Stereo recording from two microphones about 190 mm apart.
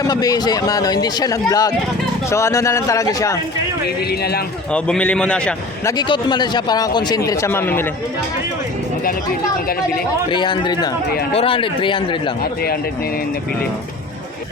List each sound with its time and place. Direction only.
0.1 s speech: 20° left (ahead or behind)
3.8 s a man's voice: 55° left (ahead or behind)
4.7 s a man's voice: 5° left (ahead or behind)
5.9 s speech: 20° left (ahead or behind)
10.2 s speech: 25° left (ahead or behind)
11.1 s a man's voice: 55° left (ahead or behind)
11.3 s speech: 30° left (ahead or behind)
12.4 s speech: 55° left (ahead or behind)